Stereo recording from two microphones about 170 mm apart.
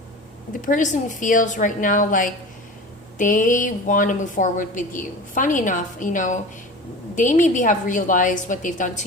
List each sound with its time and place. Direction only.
0.6 s a woman's voice: 50° left (ahead or behind)